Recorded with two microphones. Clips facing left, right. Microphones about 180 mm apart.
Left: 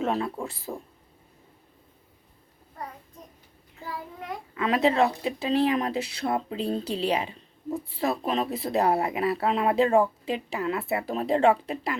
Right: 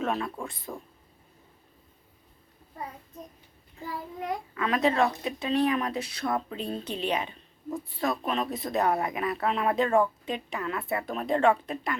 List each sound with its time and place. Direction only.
0.0 s speech: 25° left (ahead or behind)
4.5 s speech: 25° left (ahead or behind)